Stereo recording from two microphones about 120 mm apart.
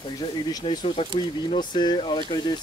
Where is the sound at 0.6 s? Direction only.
55° left (ahead or behind).